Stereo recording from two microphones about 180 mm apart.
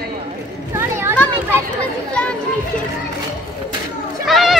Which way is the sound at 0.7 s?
15° right (ahead or behind).